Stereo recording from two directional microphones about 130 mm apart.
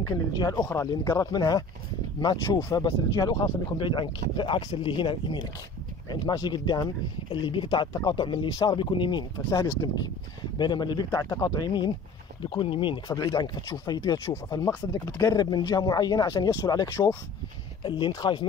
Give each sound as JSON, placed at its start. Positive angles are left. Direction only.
{"t": 0.0, "sound": "speech", "side_deg": 30}